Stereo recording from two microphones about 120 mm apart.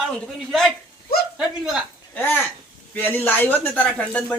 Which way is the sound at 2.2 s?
15° left (ahead or behind).